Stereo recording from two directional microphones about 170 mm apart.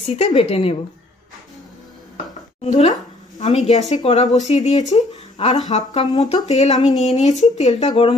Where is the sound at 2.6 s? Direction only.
40° left (ahead or behind).